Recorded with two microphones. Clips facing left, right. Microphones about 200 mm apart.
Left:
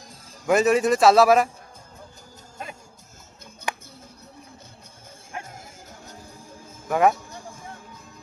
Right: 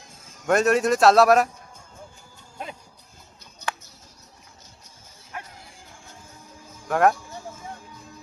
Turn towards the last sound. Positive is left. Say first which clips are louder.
# even
turn(degrees=0)  # may be behind; listen again after turning